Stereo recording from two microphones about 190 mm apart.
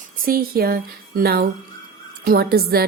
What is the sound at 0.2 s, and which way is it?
A woman's voice, 50° right (ahead or behind).